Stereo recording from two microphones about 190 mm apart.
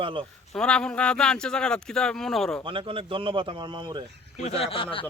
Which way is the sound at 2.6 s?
25° right (ahead or behind).